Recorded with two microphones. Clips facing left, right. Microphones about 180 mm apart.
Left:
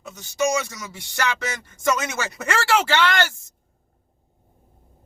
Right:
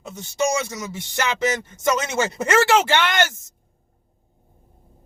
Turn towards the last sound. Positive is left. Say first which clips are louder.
# even
turn(degrees=-20)  # may be behind; listen again after turning